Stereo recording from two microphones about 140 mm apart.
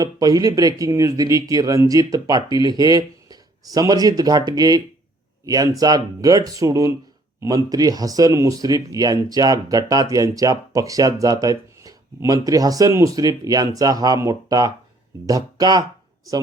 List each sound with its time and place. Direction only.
0.0 s speech: 25° right (ahead or behind)